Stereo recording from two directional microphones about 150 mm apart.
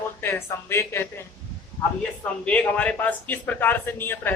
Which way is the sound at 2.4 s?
10° left (ahead or behind).